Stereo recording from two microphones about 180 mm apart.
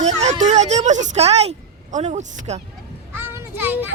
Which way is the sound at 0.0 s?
40° right (ahead or behind).